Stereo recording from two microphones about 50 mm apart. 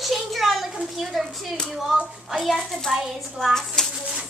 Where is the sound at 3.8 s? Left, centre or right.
Centre.